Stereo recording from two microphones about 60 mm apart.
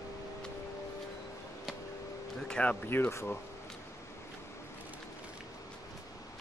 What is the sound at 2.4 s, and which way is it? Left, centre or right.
Speech, centre.